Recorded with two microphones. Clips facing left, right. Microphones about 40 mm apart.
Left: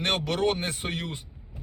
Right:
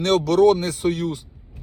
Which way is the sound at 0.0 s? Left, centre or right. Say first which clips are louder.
Right 10 dB; left.